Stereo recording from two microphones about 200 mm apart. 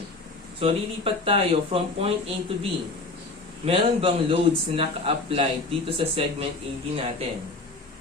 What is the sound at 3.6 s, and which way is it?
Speech, 30° right (ahead or behind).